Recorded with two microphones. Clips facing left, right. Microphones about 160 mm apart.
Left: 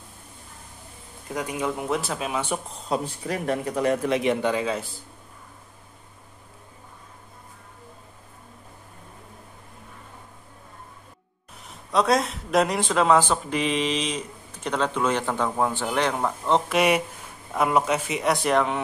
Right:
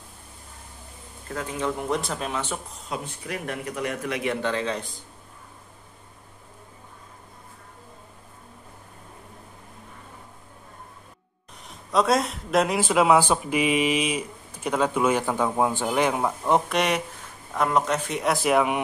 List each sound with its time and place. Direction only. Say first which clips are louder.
1.3 s speech: left 1 dB; 15° left (ahead or behind)
2.9 s speech: left 5 dB; 35° left (ahead or behind); by 5.0 s 5° left (ahead or behind)
11.7 s speech: even; centre (ahead or behind)
16.6 s a man's voice: left 3 dB; 5° left (ahead or behind)